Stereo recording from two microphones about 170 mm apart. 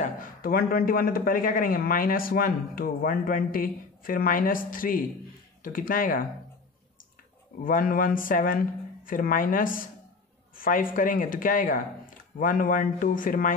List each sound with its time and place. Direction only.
0.0 s a man's voice: 55° left (ahead or behind)
7.6 s speech: 55° left (ahead or behind)